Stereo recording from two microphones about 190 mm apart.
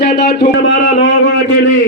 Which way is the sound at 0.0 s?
60° left (ahead or behind).